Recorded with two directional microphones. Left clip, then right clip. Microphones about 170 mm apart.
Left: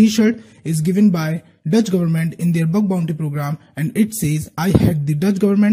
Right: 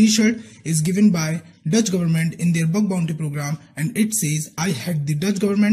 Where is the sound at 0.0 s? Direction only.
50° left (ahead or behind).